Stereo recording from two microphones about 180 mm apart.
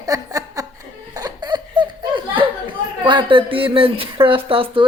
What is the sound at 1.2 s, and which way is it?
Giggle, 20° right (ahead or behind).